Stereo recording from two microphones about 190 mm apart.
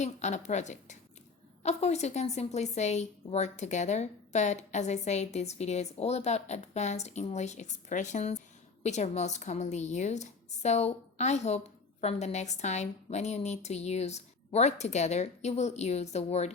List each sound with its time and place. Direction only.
0.0 s speech: 35° left (ahead or behind)